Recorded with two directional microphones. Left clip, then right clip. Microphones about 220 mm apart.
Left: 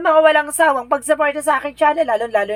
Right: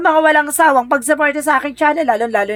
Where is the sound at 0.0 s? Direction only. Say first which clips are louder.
Right 1 dB; 45° right (ahead or behind).